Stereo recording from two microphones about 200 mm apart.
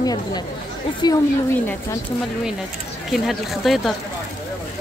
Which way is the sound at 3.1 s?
Centre (ahead or behind).